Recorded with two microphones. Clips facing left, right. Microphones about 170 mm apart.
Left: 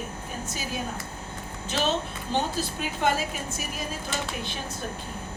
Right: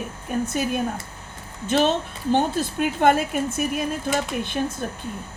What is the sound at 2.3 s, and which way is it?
A woman's voice, 55° right (ahead or behind).